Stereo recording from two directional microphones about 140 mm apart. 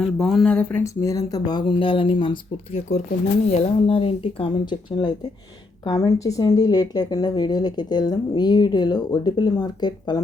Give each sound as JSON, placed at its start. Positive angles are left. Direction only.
{"t": 0.2, "sound": "speech", "side_deg": 0}
{"t": 3.5, "sound": "speech", "side_deg": 45}